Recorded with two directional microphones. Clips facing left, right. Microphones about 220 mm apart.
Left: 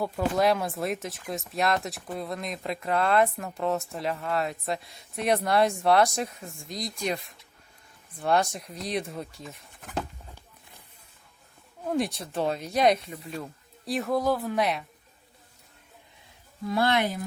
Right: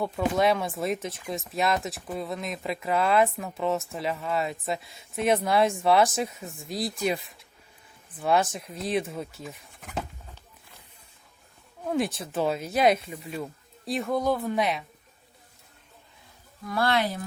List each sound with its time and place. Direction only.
0.0 s speech: centre (ahead or behind)
11.9 s speech: centre (ahead or behind)
16.6 s speech: 20° left (ahead or behind)